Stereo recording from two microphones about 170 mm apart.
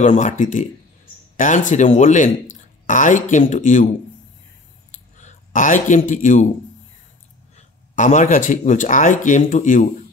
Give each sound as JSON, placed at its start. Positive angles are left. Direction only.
{"t": 0.0, "sound": "speech", "side_deg": 45}
{"t": 5.1, "sound": "a man's voice", "side_deg": 45}
{"t": 7.5, "sound": "speech", "side_deg": 45}